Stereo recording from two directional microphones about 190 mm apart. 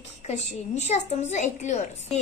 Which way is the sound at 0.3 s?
35° left (ahead or behind).